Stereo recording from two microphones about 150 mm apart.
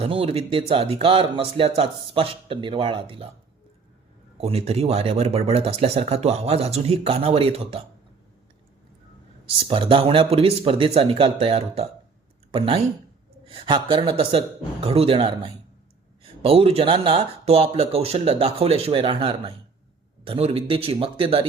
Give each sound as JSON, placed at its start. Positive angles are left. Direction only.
{"t": 0.0, "sound": "speech", "side_deg": -40}
{"t": 4.4, "sound": "speech", "side_deg": -40}
{"t": 9.6, "sound": "speech", "side_deg": -35}